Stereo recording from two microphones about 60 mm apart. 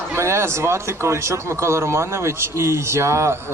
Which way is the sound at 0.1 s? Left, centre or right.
Right.